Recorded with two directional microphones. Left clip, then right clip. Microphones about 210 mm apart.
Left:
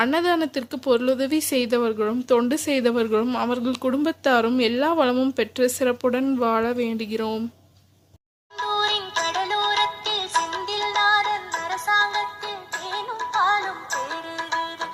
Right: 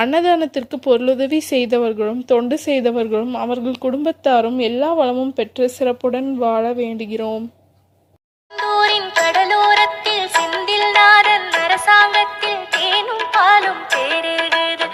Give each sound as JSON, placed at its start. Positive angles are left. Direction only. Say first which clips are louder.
{"t": 0.0, "sound": "speech", "louder": "right 6 dB", "side_deg": -15}
{"t": 8.5, "sound": "music", "louder": "right 8 dB", "side_deg": -25}
{"t": 13.1, "sound": "music", "louder": "right 8 dB", "side_deg": -55}
{"t": 13.7, "sound": "music", "louder": "right 10 dB", "side_deg": -30}